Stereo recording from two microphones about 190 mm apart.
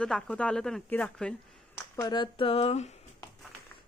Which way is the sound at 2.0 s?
25° left (ahead or behind).